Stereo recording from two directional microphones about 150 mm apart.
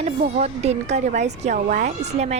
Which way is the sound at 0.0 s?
45° right (ahead or behind).